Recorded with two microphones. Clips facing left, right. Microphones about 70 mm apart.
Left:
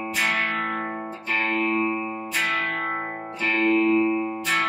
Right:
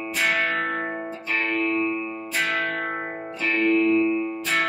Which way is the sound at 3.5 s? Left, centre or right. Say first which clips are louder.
Even; left.